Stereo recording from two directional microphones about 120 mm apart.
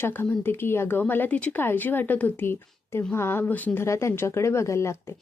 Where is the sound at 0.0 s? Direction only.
15° left (ahead or behind).